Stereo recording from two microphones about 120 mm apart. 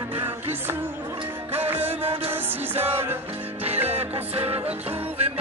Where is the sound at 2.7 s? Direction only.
20° right (ahead or behind).